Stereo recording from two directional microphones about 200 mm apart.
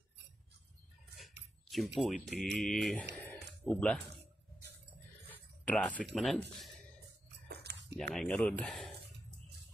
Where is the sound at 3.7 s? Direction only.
5° left (ahead or behind).